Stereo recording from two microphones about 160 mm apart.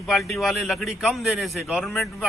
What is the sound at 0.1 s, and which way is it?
A man's voice, centre (ahead or behind).